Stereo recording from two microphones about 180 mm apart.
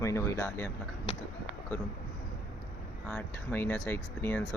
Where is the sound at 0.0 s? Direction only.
15° left (ahead or behind).